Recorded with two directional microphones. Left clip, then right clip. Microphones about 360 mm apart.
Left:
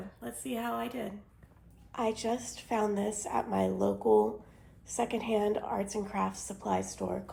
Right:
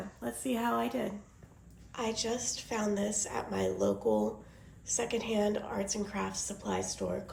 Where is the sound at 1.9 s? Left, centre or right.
Centre.